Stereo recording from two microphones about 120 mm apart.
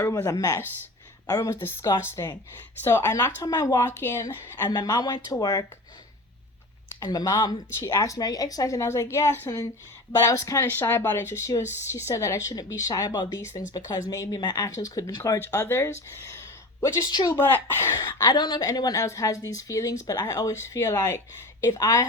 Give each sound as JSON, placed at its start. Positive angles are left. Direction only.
{"t": 0.1, "sound": "a woman's voice", "side_deg": 25}
{"t": 3.8, "sound": "a woman's voice", "side_deg": 20}
{"t": 4.7, "sound": "speech", "side_deg": 35}
{"t": 7.0, "sound": "a woman's voice", "side_deg": 30}
{"t": 17.0, "sound": "speech", "side_deg": 35}
{"t": 17.3, "sound": "speech", "side_deg": 20}
{"t": 18.2, "sound": "a woman's voice", "side_deg": 35}